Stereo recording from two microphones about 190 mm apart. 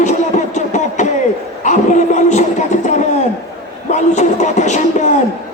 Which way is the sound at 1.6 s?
40° left (ahead or behind).